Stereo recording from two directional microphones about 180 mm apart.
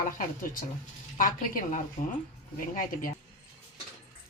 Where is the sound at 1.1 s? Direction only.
45° left (ahead or behind).